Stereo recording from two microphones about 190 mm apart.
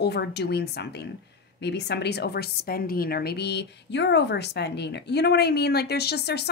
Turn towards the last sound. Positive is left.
turn(degrees=60)  # may be behind; listen again after turning